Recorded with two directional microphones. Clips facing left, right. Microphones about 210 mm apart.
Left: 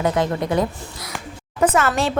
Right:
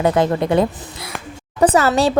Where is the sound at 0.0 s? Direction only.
30° right (ahead or behind).